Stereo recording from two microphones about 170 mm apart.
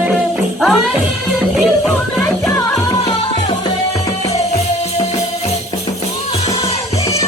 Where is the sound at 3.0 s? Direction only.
35° left (ahead or behind).